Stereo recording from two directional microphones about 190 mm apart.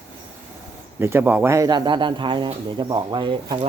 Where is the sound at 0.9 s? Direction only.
10° right (ahead or behind).